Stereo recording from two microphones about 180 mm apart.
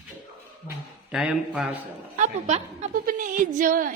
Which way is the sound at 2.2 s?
40° right (ahead or behind).